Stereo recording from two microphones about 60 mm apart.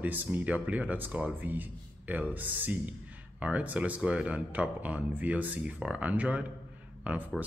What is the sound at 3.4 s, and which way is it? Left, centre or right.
Speech, right.